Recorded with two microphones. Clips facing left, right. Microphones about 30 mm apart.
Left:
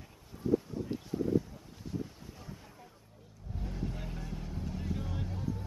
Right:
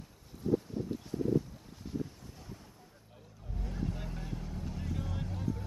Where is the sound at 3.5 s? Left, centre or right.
Centre.